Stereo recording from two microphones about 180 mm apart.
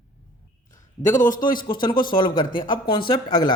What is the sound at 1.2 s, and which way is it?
Speech, 45° left (ahead or behind).